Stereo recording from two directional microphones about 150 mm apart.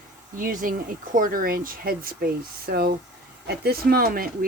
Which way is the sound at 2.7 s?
90° right.